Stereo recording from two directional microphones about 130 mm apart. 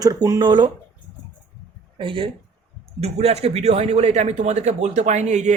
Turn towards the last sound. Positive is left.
turn(degrees=-60)  # may be behind; listen again after turning